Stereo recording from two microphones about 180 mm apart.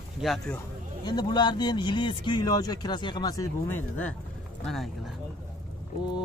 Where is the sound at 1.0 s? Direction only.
25° left (ahead or behind).